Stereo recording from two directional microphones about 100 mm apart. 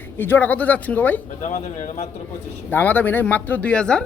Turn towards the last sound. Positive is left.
turn(degrees=10)  # may be behind; listen again after turning